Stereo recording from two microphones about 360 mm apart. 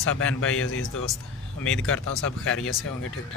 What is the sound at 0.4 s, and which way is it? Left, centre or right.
Speech, left.